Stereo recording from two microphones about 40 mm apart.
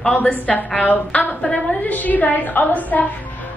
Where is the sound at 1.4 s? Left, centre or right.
Left.